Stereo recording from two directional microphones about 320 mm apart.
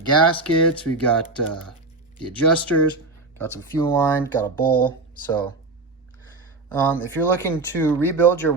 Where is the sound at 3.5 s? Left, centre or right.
Centre.